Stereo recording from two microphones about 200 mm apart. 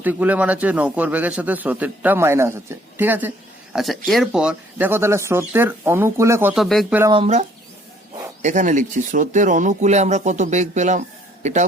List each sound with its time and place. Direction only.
0.0 s a man's voice: 10° right (ahead or behind)
7.1 s speech: 30° right (ahead or behind)